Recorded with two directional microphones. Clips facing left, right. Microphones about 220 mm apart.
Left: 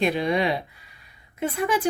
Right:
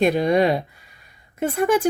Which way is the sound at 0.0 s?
45° right (ahead or behind).